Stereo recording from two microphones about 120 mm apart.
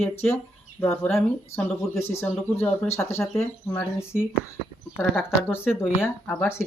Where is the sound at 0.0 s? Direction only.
20° left (ahead or behind).